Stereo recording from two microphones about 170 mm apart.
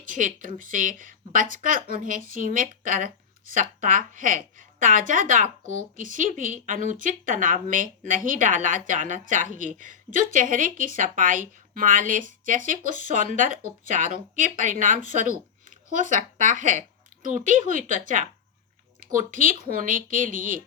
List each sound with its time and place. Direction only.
0.0 s a woman's voice: 50° right (ahead or behind)